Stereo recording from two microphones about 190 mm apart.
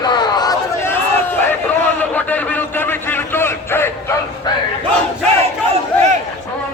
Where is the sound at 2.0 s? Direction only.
10° left (ahead or behind).